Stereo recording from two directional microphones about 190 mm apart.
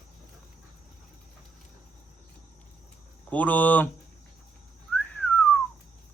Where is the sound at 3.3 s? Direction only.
10° left (ahead or behind).